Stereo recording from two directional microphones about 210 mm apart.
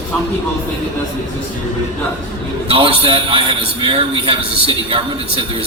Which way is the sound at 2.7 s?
25° right (ahead or behind).